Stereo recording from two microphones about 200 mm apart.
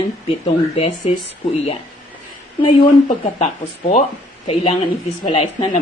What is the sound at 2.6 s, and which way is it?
Speech, 35° left (ahead or behind).